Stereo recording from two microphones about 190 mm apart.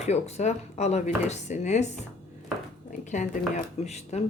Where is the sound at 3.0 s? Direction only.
40° left (ahead or behind).